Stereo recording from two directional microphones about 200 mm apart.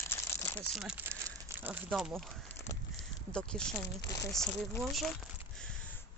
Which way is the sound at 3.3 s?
5° left (ahead or behind).